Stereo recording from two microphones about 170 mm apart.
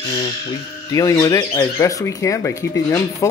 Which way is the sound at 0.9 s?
20° left (ahead or behind).